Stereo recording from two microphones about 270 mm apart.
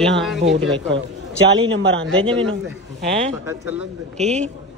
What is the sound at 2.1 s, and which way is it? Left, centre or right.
Speech, centre.